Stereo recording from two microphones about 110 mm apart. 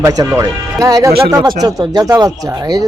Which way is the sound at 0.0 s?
30° right (ahead or behind).